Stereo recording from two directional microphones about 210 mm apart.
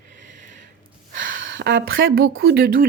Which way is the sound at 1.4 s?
60° right (ahead or behind).